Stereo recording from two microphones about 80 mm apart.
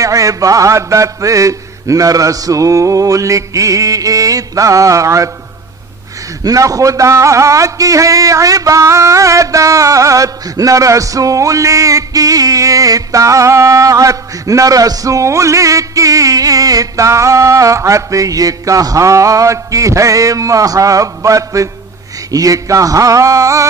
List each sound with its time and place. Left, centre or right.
0.0 s music: right
6.4 s music: right